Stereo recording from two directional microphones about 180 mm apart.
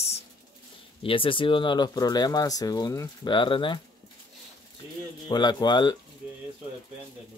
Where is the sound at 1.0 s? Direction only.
30° left (ahead or behind).